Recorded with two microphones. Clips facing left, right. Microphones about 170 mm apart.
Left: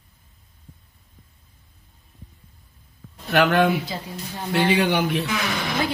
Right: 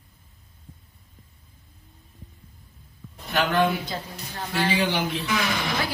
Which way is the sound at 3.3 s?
70° left (ahead or behind).